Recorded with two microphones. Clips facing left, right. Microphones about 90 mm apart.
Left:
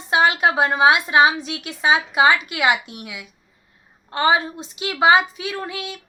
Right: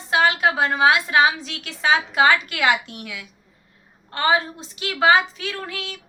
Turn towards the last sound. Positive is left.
turn(degrees=15)  # may be behind; listen again after turning